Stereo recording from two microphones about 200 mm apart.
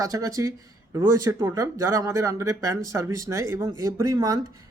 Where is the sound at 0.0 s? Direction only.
15° right (ahead or behind).